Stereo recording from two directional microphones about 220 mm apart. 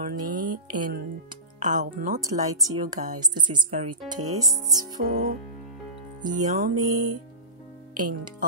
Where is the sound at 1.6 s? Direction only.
35° right (ahead or behind).